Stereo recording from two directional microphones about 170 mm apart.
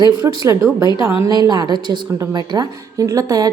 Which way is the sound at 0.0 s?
20° right (ahead or behind).